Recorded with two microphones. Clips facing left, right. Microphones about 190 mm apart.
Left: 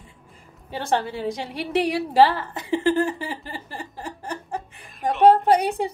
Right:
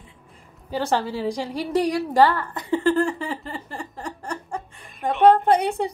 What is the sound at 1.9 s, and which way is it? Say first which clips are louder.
A woman's voice: left 2 dB; 25° left (ahead or behind).